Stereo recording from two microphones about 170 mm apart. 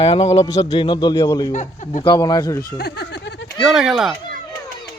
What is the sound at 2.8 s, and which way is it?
Speech, 75° left (ahead or behind).